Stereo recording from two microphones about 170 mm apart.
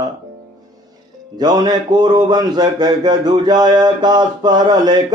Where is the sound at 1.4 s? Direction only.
25° right (ahead or behind).